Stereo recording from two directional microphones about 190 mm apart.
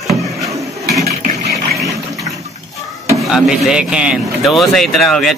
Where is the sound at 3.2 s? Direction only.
Centre (ahead or behind).